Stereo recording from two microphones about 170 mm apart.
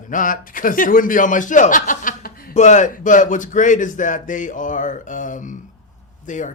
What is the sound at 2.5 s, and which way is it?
Speech, 45° left (ahead or behind).